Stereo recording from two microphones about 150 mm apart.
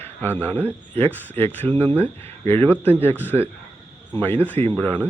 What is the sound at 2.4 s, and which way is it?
Speech, 35° right (ahead or behind).